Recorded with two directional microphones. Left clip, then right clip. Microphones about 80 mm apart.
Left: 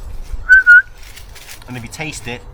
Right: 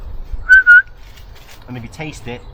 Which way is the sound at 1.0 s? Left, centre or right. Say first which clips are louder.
Left 5 dB; centre.